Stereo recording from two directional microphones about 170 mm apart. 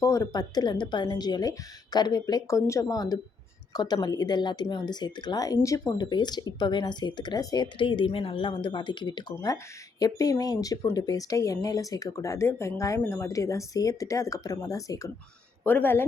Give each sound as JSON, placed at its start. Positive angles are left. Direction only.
{"t": 0.0, "sound": "a woman's voice", "side_deg": 20}